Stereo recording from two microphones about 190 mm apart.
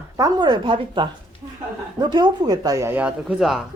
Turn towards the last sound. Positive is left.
turn(degrees=0)  # may be behind; listen again after turning